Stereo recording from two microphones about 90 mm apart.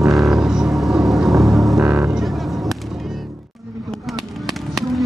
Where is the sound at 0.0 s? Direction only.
35° right (ahead or behind).